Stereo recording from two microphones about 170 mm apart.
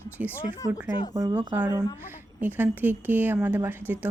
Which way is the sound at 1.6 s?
15° right (ahead or behind).